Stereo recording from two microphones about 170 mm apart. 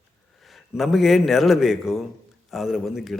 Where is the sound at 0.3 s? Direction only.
Centre (ahead or behind).